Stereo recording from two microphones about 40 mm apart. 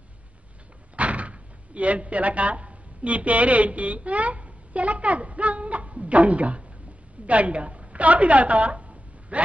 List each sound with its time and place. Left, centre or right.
0.9 s a woman's voice: right